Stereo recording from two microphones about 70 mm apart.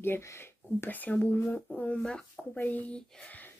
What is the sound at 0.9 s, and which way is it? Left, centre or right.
Speech, left.